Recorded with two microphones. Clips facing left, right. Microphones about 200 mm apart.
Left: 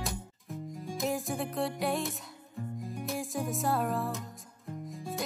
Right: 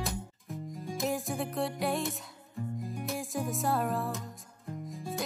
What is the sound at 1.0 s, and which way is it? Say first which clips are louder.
Music: even; centre (ahead or behind).